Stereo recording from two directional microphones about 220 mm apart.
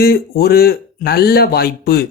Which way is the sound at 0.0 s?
45° left (ahead or behind).